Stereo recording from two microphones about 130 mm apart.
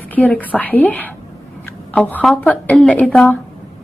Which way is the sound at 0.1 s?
10° left (ahead or behind).